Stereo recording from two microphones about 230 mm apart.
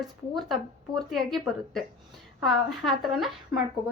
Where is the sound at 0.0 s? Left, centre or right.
Centre.